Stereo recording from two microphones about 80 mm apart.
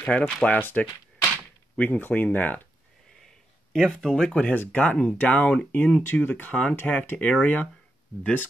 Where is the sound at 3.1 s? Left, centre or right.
Centre.